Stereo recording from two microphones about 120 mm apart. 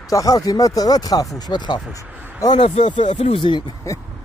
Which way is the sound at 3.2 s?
50° left (ahead or behind).